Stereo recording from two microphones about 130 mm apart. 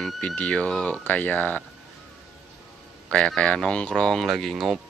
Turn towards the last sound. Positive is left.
turn(degrees=0)  # may be behind; listen again after turning